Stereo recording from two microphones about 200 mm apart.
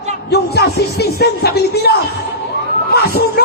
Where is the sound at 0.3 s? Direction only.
55° left (ahead or behind).